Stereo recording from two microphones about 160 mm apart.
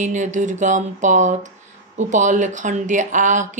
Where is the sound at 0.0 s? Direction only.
50° right (ahead or behind).